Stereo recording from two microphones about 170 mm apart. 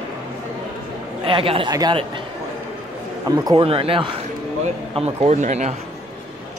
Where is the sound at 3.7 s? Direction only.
35° right (ahead or behind).